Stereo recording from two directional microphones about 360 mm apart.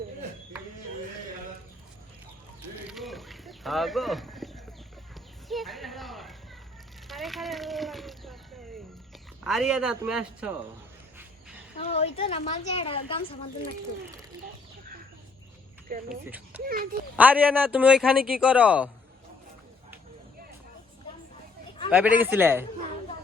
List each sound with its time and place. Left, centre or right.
2.9 s a sound: centre
9.4 s speech: centre
11.8 s a woman's voice: centre
16.0 s speech: centre
16.6 s a child's voice: right
17.2 s speech: centre
21.8 s speech: centre